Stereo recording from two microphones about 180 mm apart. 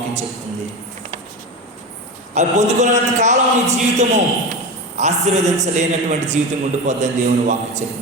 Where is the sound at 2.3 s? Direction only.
40° right (ahead or behind).